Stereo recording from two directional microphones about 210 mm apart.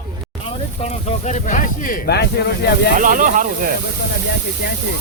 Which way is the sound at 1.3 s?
35° left (ahead or behind).